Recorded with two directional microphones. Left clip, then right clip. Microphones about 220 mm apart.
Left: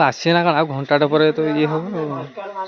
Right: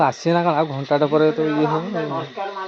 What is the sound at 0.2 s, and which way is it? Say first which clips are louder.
Speech: left 2 dB; 20° left (ahead or behind).